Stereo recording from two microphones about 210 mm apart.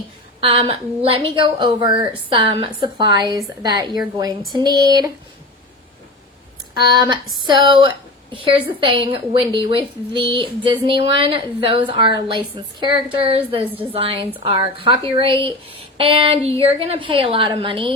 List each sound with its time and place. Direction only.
0.3 s a woman's voice: 25° right (ahead or behind)
6.9 s a sound: 20° right (ahead or behind)
7.4 s a woman's voice: 20° right (ahead or behind)